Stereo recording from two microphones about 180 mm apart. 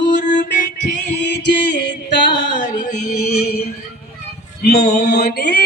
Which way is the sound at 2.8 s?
45° left (ahead or behind).